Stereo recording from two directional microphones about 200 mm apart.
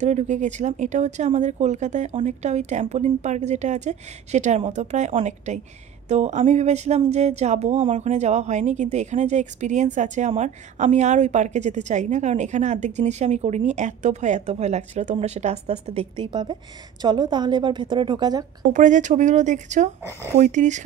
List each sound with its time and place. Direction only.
0.0 s a woman's voice: 35° right (ahead or behind)
18.7 s speech: 40° right (ahead or behind)